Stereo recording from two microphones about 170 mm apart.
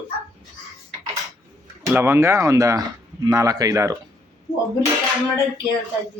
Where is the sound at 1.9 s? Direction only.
15° right (ahead or behind).